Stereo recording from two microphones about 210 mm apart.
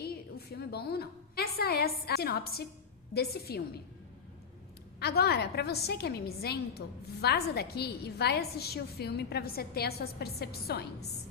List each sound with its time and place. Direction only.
0.0 s a woman's voice: 50° left (ahead or behind)
4.9 s a woman's voice: 50° left (ahead or behind)